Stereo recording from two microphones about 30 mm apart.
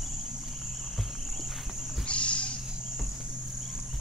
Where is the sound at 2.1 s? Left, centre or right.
Left.